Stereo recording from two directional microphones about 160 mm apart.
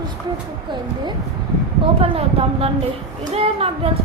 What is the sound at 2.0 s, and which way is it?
Speech, 35° right (ahead or behind).